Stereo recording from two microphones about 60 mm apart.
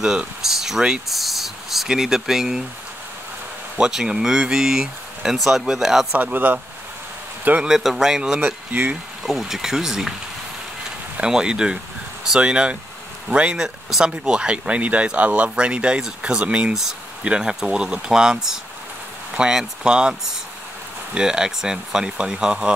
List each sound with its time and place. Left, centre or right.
0.0 s speech: centre
3.7 s speech: centre
6.1 s speech: right
7.6 s speech: centre
8.7 s speech: right
9.2 s speech: centre
11.1 s speech: centre
13.8 s speech: centre